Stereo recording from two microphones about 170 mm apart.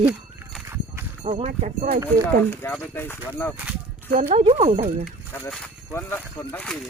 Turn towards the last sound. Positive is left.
turn(degrees=5)  # may be behind; listen again after turning